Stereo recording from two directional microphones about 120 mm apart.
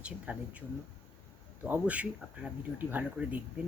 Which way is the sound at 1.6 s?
10° right (ahead or behind).